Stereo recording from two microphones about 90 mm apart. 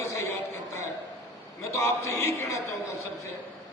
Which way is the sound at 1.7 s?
30° left (ahead or behind).